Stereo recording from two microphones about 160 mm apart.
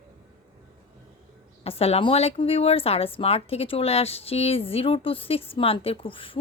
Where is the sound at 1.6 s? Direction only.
40° left (ahead or behind).